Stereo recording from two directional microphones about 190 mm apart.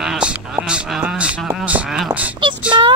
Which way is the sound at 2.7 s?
20° right (ahead or behind).